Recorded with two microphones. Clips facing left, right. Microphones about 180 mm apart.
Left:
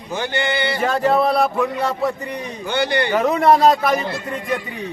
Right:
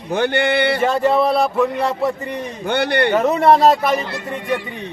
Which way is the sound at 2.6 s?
60° right (ahead or behind).